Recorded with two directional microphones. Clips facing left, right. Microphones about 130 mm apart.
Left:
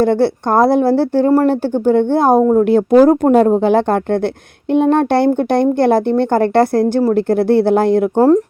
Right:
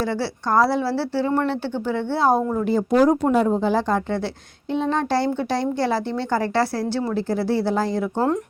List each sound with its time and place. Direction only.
0.0 s speech: 55° left (ahead or behind)
2.4 s speech: 40° left (ahead or behind)
2.6 s a woman's voice: 60° left (ahead or behind)